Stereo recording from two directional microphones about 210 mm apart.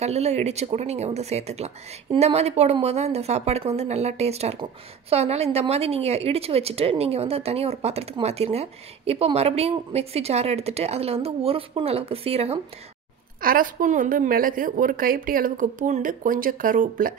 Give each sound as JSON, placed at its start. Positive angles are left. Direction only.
{"t": 0.0, "sound": "a woman's voice", "side_deg": -30}
{"t": 13.4, "sound": "a woman's voice", "side_deg": -40}